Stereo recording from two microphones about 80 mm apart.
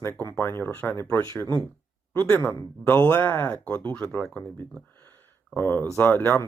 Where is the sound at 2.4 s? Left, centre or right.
Centre.